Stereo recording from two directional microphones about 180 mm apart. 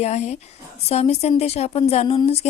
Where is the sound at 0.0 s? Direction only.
35° left (ahead or behind).